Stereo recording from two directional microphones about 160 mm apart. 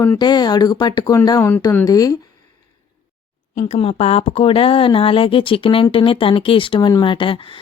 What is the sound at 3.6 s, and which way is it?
Speech, 40° left (ahead or behind).